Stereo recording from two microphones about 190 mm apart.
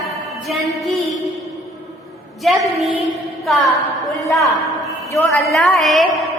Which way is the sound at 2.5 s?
Centre (ahead or behind).